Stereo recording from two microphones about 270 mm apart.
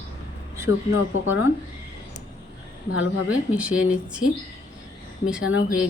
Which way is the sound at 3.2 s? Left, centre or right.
Centre.